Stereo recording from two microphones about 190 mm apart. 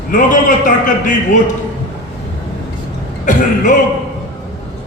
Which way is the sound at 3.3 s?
40° left (ahead or behind).